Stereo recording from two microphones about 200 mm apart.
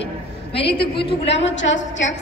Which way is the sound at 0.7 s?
55° left (ahead or behind).